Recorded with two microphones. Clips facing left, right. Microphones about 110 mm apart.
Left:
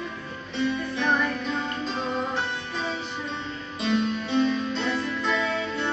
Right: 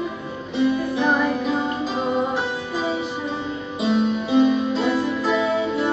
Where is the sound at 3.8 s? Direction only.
5° right (ahead or behind).